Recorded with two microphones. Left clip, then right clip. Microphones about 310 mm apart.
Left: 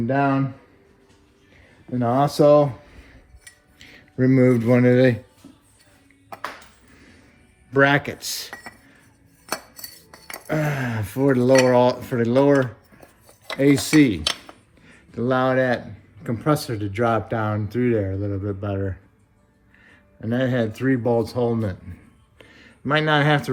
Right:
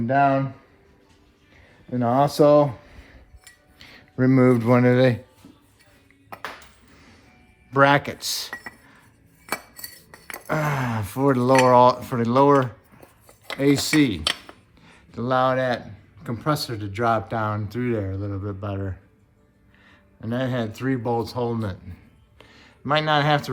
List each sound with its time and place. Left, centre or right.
0.1 s speech: right
1.9 s speech: right
7.7 s speech: right
10.4 s speech: right
13.6 s speech: centre
22.4 s a sound: centre